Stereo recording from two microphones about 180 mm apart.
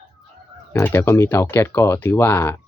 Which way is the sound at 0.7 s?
15° left (ahead or behind).